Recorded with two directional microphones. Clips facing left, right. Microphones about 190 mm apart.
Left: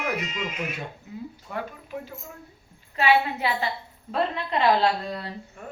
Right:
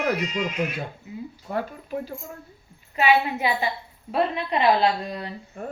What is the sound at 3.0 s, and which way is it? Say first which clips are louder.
A woman's voice: right 1 dB; 15° right (ahead or behind).